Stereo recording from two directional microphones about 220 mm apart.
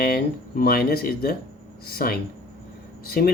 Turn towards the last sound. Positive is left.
turn(degrees=45)  # may be behind; listen again after turning